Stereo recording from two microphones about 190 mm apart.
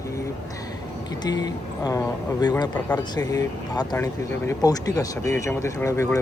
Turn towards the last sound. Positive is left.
turn(degrees=15)  # may be behind; listen again after turning